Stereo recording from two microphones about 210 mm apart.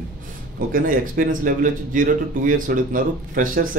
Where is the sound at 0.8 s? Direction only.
40° right (ahead or behind).